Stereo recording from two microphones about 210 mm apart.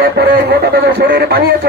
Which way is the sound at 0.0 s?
50° right (ahead or behind).